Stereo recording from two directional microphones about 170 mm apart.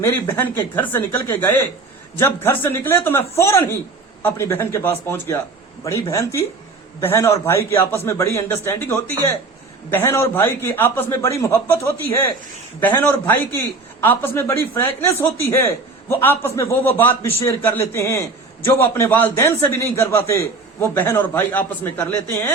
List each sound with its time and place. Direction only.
0.0 s a man's voice: 15° left (ahead or behind)